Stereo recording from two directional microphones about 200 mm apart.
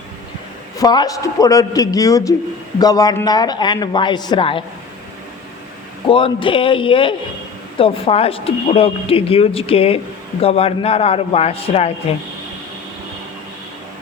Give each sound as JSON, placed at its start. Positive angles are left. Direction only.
{"t": 0.8, "sound": "a man's voice", "side_deg": 20}
{"t": 6.1, "sound": "speech", "side_deg": 25}